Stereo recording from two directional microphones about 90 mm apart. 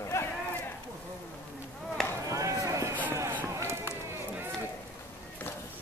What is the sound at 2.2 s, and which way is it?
Run, 35° right (ahead or behind).